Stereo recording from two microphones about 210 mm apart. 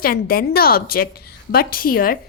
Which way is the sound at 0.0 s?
45° left (ahead or behind).